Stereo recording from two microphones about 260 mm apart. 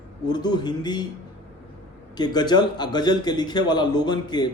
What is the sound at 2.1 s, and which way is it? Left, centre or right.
A man's voice, centre.